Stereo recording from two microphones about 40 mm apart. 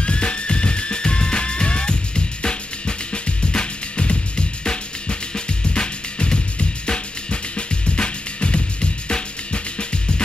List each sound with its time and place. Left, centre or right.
0.0 s music: left